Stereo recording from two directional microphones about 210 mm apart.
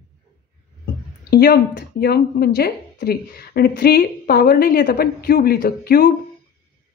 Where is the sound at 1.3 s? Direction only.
45° left (ahead or behind).